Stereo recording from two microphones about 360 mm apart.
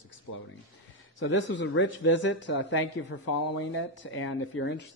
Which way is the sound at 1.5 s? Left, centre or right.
Left.